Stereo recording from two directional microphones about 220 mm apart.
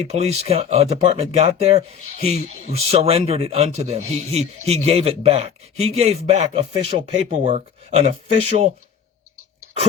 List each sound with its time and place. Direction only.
0.1 s speech: 30° right (ahead or behind)